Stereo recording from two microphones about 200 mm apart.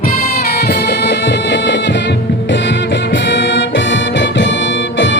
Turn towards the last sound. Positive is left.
turn(degrees=65)  # may be behind; listen again after turning